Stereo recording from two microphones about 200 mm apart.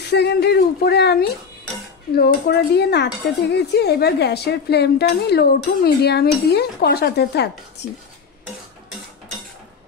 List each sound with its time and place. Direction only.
0.1 s speech: 55° left (ahead or behind)